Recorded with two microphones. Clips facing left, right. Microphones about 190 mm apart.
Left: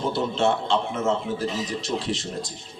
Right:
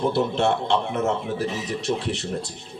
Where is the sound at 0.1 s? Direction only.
60° right (ahead or behind).